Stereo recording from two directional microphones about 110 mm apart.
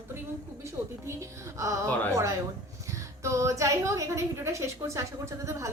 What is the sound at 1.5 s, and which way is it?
A woman's voice, 30° right (ahead or behind).